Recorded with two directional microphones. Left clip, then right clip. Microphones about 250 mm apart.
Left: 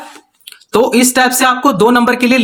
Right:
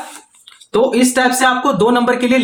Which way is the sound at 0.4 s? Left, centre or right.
Left.